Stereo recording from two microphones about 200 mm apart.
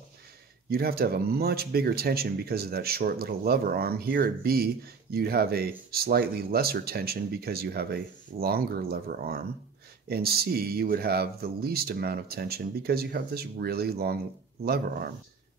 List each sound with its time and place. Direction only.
0.7 s speech: 50° right (ahead or behind)